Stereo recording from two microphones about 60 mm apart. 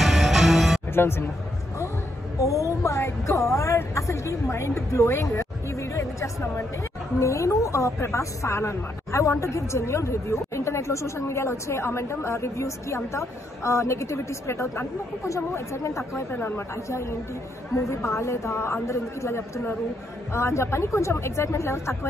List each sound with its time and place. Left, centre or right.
0.0 s music: centre
0.9 s speech: left
2.4 s speech: left
18.0 s speech: left